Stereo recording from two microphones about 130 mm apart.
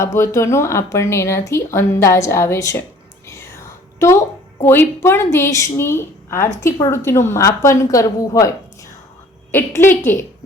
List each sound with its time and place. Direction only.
0.0 s speech: 20° left (ahead or behind)
3.2 s whispering: 20° left (ahead or behind)
4.6 s a woman's voice: 20° left (ahead or behind)